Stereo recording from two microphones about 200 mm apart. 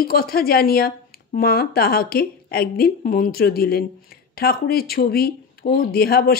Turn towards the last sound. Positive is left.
turn(degrees=50)  # may be behind; listen again after turning